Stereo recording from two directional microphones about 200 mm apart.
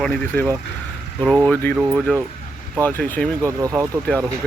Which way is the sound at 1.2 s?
5° right (ahead or behind).